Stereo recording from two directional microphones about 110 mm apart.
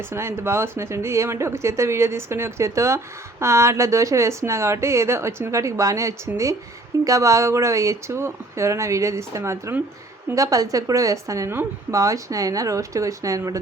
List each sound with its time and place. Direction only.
0.1 s a woman's voice: 25° right (ahead or behind)